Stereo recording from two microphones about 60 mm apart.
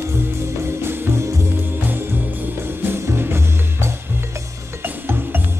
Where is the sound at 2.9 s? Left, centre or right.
Right.